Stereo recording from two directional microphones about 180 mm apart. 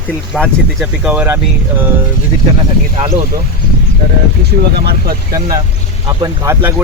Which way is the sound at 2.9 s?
30° right (ahead or behind).